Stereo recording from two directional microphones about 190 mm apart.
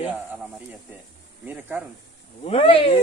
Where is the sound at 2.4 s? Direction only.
30° left (ahead or behind).